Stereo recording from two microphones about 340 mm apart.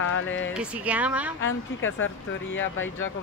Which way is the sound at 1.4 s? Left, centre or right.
Left.